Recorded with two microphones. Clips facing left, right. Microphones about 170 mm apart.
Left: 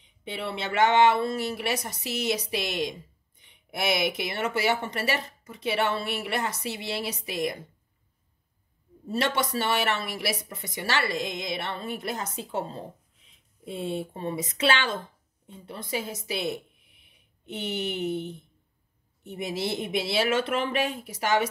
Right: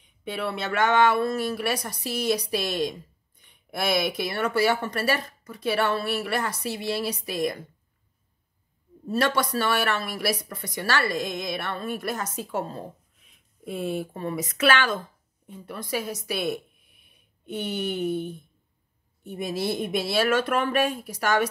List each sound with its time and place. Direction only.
0.2 s speech: 25° left (ahead or behind)
9.2 s speech: 20° left (ahead or behind)